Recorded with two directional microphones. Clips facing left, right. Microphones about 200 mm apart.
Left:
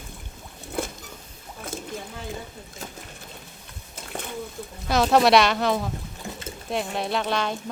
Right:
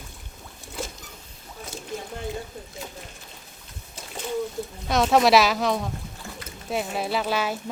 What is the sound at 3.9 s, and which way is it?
Splash, 60° left (ahead or behind).